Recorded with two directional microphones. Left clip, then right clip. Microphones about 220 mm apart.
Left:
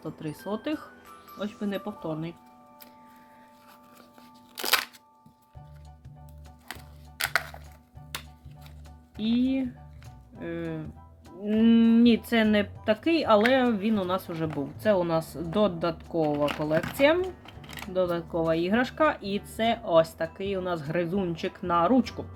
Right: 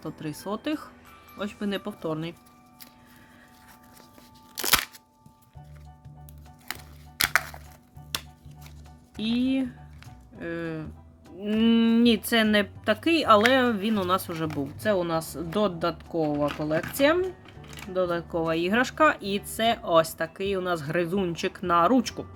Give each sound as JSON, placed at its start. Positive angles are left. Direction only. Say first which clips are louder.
{"t": 0.0, "sound": "speech", "louder": "right 1 dB", "side_deg": -15}
{"t": 4.5, "sound": "crunch", "louder": "right 2 dB", "side_deg": -5}
{"t": 7.2, "sound": "music", "louder": "right 4 dB", "side_deg": -10}
{"t": 9.1, "sound": "speech", "louder": "right 1 dB", "side_deg": -20}
{"t": 17.4, "sound": "a sound", "louder": "left 2 dB", "side_deg": 35}
{"t": 17.9, "sound": "speech", "louder": "even", "side_deg": -15}